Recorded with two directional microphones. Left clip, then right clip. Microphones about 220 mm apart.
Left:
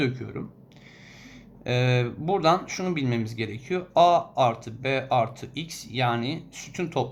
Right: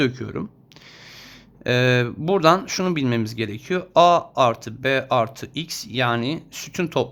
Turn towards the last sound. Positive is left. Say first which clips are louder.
# right 5 dB
turn(degrees=-45)  # may be behind; listen again after turning